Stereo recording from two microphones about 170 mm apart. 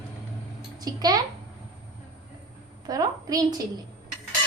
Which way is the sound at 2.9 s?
20° right (ahead or behind).